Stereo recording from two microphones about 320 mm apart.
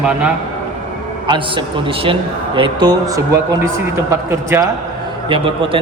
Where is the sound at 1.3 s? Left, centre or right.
Centre.